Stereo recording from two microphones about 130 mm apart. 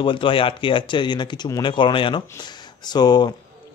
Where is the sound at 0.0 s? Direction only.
40° left (ahead or behind).